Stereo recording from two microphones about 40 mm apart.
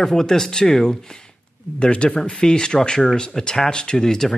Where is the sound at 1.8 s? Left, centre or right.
Left.